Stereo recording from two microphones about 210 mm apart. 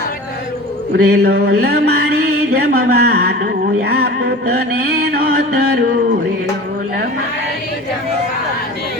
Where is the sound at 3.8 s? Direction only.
50° right (ahead or behind).